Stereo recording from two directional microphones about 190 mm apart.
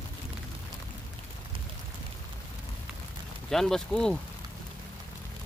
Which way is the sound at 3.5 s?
Centre (ahead or behind).